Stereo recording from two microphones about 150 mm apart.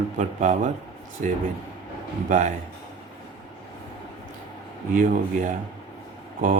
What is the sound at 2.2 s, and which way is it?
Speech, 55° right (ahead or behind).